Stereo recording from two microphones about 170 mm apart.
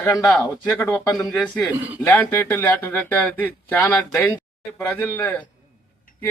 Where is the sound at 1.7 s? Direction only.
10° right (ahead or behind).